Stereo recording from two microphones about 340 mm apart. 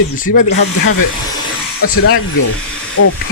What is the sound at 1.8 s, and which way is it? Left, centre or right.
Speech, left.